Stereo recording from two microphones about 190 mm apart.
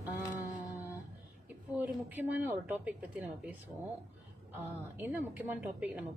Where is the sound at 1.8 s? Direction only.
10° right (ahead or behind).